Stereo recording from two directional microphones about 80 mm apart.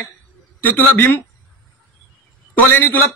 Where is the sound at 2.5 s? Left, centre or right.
Left.